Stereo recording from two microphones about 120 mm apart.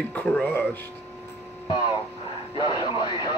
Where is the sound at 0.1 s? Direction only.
10° left (ahead or behind).